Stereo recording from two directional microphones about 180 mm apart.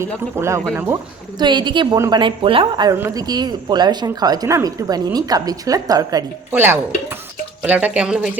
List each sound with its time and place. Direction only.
0.0 s speech: 15° right (ahead or behind)
1.4 s speech: 25° right (ahead or behind); by 8.3 s 5° right (ahead or behind)